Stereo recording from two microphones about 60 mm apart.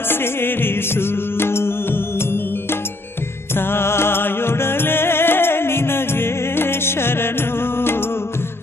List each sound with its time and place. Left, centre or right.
0.1 s music: left
3.5 s music: left